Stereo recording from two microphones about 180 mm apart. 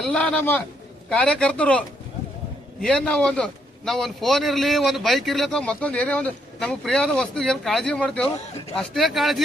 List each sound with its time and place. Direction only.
0.0 s a man's voice: 5° left (ahead or behind)
2.8 s a man's voice: 5° left (ahead or behind)